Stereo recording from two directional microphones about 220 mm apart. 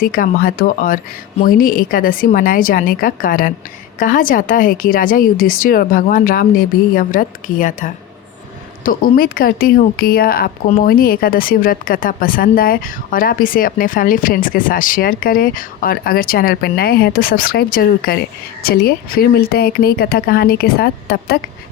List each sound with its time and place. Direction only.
0.0 s speech: 40° left (ahead or behind)